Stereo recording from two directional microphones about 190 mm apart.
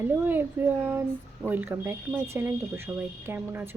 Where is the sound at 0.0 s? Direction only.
10° right (ahead or behind).